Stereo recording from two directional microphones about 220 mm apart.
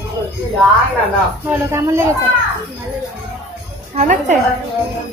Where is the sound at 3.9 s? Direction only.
30° right (ahead or behind).